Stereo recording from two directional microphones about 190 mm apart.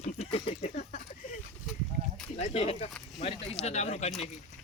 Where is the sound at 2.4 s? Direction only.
30° left (ahead or behind).